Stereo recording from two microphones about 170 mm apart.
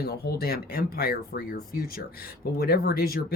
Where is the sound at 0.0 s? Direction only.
70° left (ahead or behind).